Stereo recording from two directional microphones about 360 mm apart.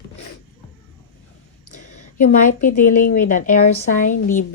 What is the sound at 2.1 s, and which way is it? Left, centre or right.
Speech, left.